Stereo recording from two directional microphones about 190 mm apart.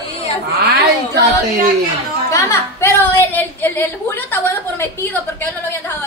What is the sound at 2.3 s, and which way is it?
A woman's voice, 15° left (ahead or behind).